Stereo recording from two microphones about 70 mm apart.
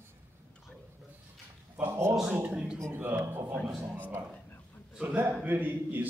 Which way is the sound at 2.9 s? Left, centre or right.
Right.